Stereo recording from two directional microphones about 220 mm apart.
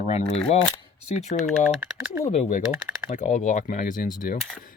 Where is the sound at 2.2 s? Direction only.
35° left (ahead or behind).